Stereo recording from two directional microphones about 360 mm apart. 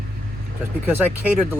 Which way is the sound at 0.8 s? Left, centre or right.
Centre.